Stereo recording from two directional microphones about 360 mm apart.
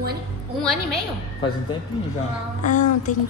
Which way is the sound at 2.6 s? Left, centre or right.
Left.